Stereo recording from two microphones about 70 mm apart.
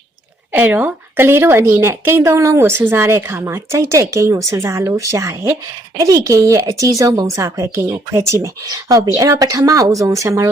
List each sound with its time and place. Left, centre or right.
0.5 s a woman's voice: right
8.4 s speech: right